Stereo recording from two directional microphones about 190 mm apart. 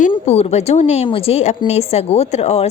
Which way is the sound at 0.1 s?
35° left (ahead or behind).